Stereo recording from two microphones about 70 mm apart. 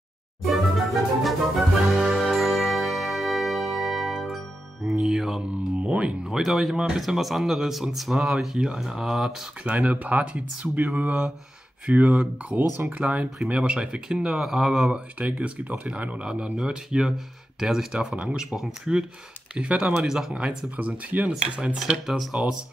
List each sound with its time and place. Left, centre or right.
0.5 s music: centre
5.0 s speech: centre
5.8 s speech: centre
6.2 s speech: centre
9.6 s speech: right
12.7 s speech: right
13.0 s speech: centre
15.1 s speech: right